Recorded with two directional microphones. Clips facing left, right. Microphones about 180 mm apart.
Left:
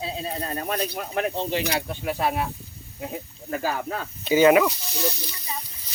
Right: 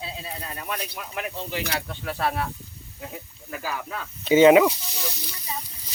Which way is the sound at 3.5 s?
35° left (ahead or behind).